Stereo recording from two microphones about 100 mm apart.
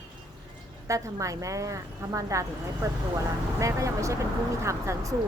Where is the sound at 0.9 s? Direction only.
35° right (ahead or behind).